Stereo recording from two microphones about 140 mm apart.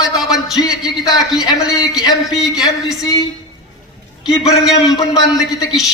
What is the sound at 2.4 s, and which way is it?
Speech, 5° right (ahead or behind).